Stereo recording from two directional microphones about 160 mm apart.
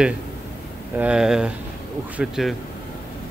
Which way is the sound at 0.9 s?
5° right (ahead or behind).